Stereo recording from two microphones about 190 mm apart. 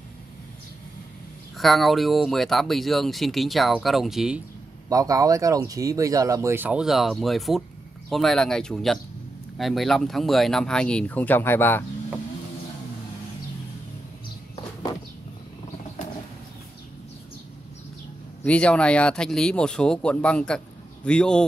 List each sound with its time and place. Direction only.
1.6 s speech: centre (ahead or behind)
4.8 s speech: 20° right (ahead or behind); by 11.8 s 10° left (ahead or behind)
18.4 s speech: 5° left (ahead or behind)